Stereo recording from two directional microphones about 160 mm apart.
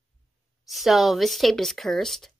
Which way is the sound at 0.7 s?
Centre (ahead or behind).